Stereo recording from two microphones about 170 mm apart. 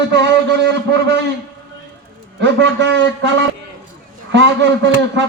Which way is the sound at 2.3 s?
90° right.